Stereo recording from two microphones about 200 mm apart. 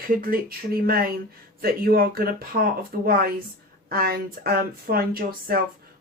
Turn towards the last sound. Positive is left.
turn(degrees=-45)  # may be behind; listen again after turning